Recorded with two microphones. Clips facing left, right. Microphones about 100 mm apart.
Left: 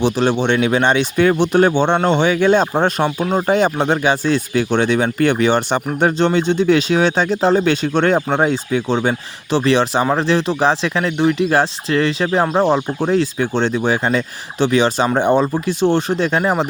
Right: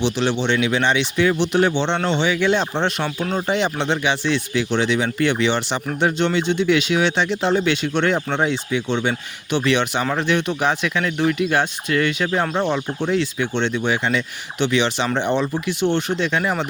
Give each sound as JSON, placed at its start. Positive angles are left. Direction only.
{"t": 0.0, "sound": "speech", "side_deg": 45}